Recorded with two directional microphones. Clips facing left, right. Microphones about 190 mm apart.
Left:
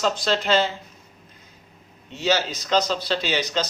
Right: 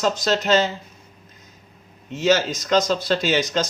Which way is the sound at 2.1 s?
45° right (ahead or behind).